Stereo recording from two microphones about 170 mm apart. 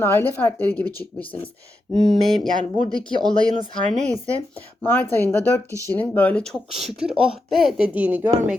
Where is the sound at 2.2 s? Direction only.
Centre (ahead or behind).